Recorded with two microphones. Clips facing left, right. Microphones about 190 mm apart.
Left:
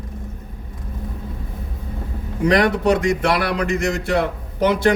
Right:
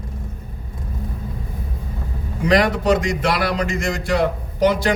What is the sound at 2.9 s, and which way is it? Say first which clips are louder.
A man's voice: left 1 dB; 60° left (ahead or behind).